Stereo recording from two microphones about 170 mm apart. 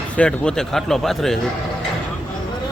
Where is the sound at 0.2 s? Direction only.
5° left (ahead or behind).